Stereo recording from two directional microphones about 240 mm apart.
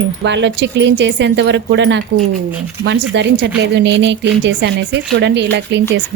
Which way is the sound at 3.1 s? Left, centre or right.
Right.